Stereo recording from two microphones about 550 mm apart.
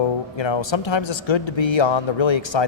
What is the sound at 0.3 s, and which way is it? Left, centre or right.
A man's voice, left.